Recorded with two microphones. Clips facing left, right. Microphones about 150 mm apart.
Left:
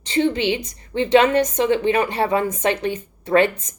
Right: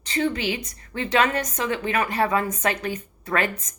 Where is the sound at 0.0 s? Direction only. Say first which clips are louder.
Left 5 dB; 25° left (ahead or behind).